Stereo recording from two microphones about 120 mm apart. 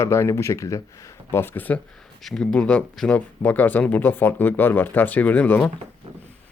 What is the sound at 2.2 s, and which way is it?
Speech, 5° left (ahead or behind).